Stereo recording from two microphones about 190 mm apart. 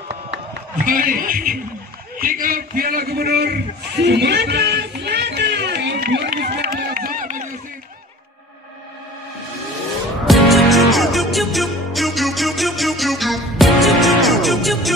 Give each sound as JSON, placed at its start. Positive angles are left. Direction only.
{"t": 0.8, "sound": "speech", "side_deg": -45}
{"t": 2.1, "sound": "a sound", "side_deg": -45}
{"t": 10.2, "sound": "music", "side_deg": 0}